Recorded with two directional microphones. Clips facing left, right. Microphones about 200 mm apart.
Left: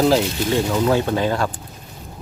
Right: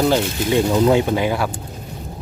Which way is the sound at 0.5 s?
15° right (ahead or behind).